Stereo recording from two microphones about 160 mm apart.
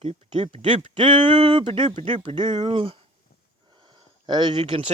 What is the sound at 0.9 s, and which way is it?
Speech, 30° right (ahead or behind).